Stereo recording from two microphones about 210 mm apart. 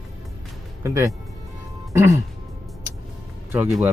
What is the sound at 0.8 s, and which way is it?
Speech, 15° right (ahead or behind).